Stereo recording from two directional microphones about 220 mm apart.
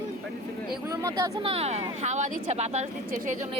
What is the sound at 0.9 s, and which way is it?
Speech, 15° right (ahead or behind).